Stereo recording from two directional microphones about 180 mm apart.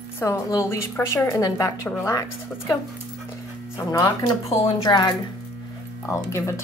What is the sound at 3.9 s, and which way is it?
A woman's voice, 20° left (ahead or behind).